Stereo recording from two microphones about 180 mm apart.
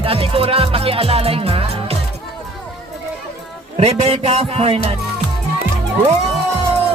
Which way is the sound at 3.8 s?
35° right (ahead or behind).